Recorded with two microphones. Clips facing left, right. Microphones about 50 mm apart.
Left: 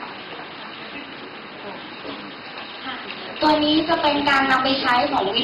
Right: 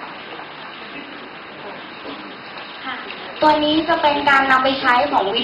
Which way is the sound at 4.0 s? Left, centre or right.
Centre.